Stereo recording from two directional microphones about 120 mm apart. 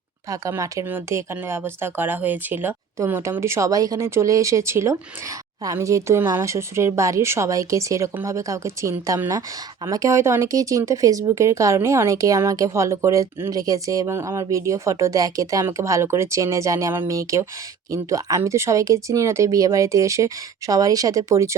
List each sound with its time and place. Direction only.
0.3 s speech: 30° right (ahead or behind)